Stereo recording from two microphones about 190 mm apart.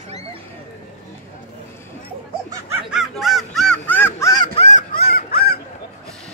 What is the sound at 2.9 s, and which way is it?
Honk, centre (ahead or behind).